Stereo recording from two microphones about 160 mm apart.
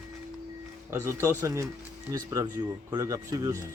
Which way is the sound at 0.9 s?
15° right (ahead or behind).